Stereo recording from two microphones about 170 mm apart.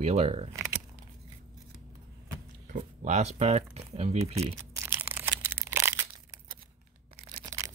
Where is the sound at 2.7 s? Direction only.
45° right (ahead or behind).